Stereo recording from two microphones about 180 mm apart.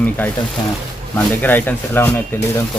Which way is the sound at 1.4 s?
10° left (ahead or behind).